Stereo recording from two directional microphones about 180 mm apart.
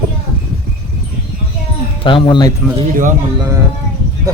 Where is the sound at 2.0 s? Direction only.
30° left (ahead or behind).